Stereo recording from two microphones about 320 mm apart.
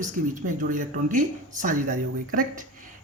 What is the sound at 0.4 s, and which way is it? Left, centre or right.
Speech, right.